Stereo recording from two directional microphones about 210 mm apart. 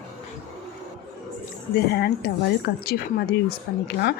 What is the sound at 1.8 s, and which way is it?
Speech, 50° left (ahead or behind).